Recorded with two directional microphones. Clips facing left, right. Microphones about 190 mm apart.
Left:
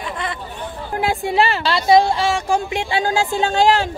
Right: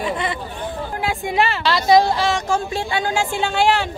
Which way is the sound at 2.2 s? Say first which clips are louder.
Left 1 dB; 10° left (ahead or behind).